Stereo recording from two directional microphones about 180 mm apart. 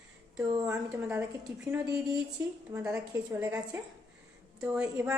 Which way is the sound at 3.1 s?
20° right (ahead or behind).